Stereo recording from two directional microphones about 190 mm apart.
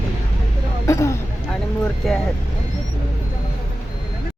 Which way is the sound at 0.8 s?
15° left (ahead or behind).